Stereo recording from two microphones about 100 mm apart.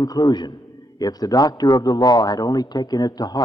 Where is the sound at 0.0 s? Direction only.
40° left (ahead or behind).